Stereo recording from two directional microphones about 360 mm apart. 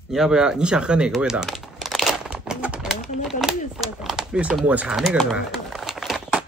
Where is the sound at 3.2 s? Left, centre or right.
Centre.